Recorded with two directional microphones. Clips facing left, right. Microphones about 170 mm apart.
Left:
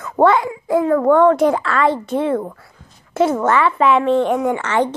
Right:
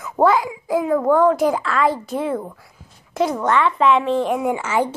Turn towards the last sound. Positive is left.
turn(degrees=-10)  # may be behind; listen again after turning